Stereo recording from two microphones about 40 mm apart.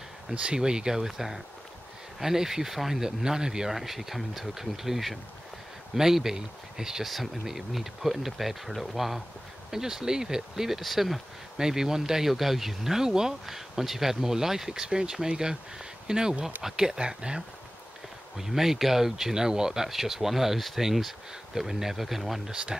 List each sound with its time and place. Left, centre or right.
0.6 s speech: centre
3.7 s speech: centre
11.5 s speech: centre
18.4 s speech: centre